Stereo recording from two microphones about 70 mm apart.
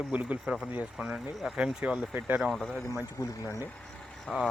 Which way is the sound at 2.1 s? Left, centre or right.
Right.